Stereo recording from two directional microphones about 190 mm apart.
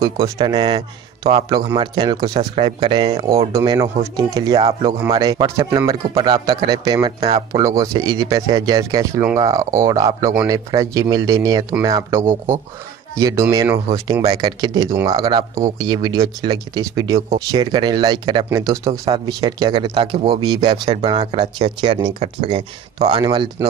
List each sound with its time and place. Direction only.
0.0 s speech: 20° right (ahead or behind)
7.2 s speech: 30° right (ahead or behind)
7.5 s speech: 15° right (ahead or behind)
21.1 s speech: 35° right (ahead or behind)
21.4 s speech: 25° right (ahead or behind)